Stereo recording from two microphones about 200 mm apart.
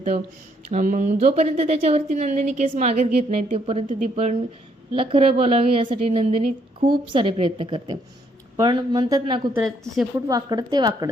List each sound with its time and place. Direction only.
0.7 s a woman's voice: 40° right (ahead or behind); by 9.4 s 20° right (ahead or behind)
9.6 s speech: centre (ahead or behind)
10.2 s a woman's voice: 20° right (ahead or behind)